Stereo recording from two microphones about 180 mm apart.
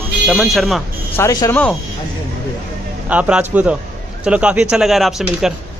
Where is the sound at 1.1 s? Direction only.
15° left (ahead or behind).